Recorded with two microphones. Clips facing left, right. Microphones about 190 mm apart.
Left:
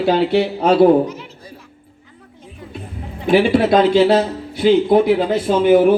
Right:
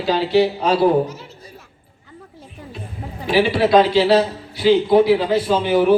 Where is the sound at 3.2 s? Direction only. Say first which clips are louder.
Left 3 dB; 50° left (ahead or behind).